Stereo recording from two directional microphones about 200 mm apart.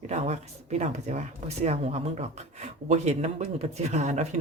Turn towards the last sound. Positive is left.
turn(degrees=-35)  # may be behind; listen again after turning